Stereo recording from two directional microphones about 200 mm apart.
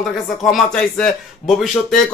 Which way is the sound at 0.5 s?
5° left (ahead or behind).